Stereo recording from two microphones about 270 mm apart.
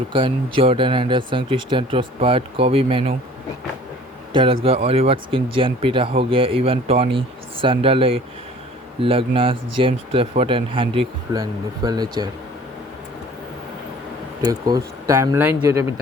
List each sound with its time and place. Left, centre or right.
0.1 s speech: centre
4.6 s speech: right
14.4 s speech: centre